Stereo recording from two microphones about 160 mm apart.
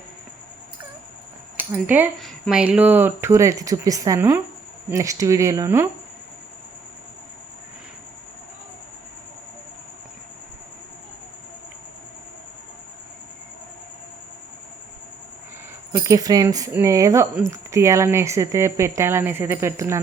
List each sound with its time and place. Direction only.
1.5 s speech: 10° right (ahead or behind)
15.9 s speech: 20° right (ahead or behind)